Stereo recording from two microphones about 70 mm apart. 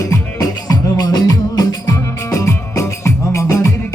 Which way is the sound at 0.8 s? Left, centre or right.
Left.